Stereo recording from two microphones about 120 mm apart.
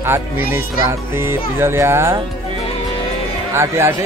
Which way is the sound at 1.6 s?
20° right (ahead or behind).